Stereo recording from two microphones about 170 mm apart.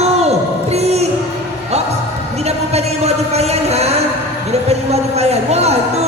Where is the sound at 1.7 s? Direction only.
40° right (ahead or behind).